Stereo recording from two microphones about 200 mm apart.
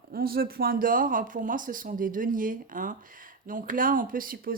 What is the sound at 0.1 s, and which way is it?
Speech, 50° right (ahead or behind).